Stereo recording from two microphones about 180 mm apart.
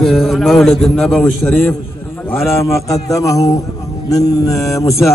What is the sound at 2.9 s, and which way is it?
A man's voice, 20° left (ahead or behind).